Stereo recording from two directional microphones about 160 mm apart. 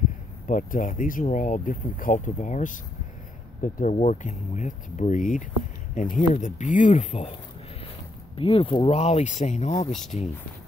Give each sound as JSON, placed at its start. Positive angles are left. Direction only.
{"t": 0.5, "sound": "speech", "side_deg": 55}
{"t": 3.9, "sound": "speech", "side_deg": 45}
{"t": 8.4, "sound": "speech", "side_deg": 35}